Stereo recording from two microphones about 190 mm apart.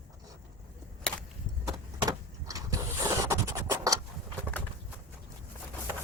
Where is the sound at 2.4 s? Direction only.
15° right (ahead or behind).